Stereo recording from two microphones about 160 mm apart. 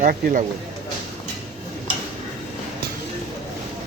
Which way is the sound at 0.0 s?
60° right (ahead or behind).